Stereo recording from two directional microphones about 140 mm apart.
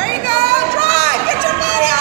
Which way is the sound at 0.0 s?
90° right.